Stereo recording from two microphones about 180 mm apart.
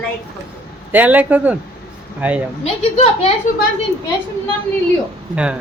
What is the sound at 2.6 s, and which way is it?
Speech, 35° left (ahead or behind).